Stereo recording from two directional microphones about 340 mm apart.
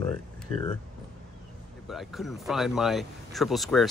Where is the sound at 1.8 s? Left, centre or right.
Centre.